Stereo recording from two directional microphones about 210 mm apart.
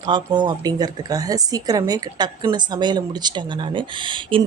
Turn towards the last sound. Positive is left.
turn(degrees=-25)  # may be behind; listen again after turning